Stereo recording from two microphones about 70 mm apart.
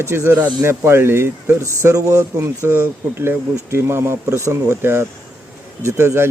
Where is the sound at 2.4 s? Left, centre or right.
Right.